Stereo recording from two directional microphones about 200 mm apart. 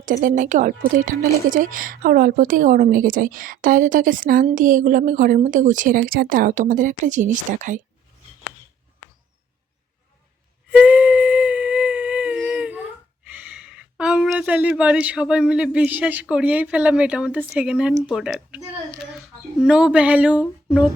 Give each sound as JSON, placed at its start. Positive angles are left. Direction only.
{"t": 0.0, "sound": "a woman's voice", "side_deg": -40}
{"t": 10.7, "sound": "a sound", "side_deg": -5}
{"t": 16.2, "sound": "speech", "side_deg": -5}